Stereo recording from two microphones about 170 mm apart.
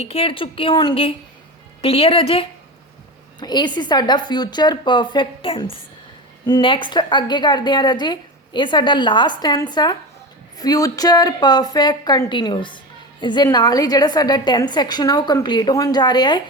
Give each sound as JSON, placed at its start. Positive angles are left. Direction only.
{"t": 0.0, "sound": "a woman's voice", "side_deg": 35}